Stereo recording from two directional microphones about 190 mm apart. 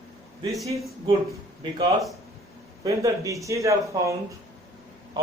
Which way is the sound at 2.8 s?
15° right (ahead or behind).